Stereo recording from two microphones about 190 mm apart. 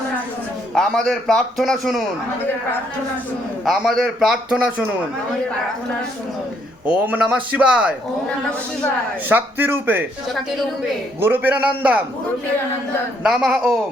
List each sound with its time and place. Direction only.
0.7 s a man's voice: 5° left (ahead or behind)
3.6 s a man's voice: centre (ahead or behind)
6.8 s a man's voice: 10° right (ahead or behind)
9.3 s a man's voice: 10° right (ahead or behind)
11.2 s a man's voice: 10° right (ahead or behind)
13.2 s a man's voice: 5° right (ahead or behind)